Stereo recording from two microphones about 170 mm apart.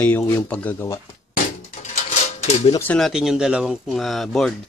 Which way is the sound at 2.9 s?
Centre (ahead or behind).